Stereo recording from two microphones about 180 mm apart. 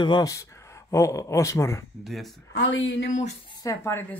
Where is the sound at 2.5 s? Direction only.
90° left.